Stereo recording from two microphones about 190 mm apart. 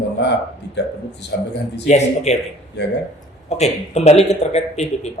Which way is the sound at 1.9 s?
35° left (ahead or behind).